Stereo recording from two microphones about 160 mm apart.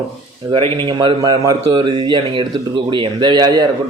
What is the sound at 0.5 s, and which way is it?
Speech, 30° right (ahead or behind).